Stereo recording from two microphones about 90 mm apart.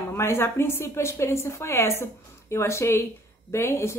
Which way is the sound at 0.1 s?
25° left (ahead or behind).